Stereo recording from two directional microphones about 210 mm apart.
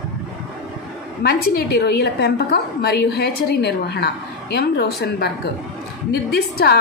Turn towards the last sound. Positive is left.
turn(degrees=50)  # may be behind; listen again after turning